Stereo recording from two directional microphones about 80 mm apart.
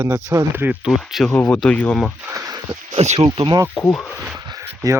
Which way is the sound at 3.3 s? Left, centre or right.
Right.